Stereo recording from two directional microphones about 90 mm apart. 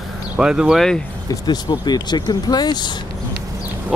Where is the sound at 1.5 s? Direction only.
50° left (ahead or behind).